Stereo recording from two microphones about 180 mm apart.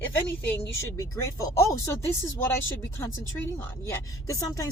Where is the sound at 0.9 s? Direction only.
15° left (ahead or behind).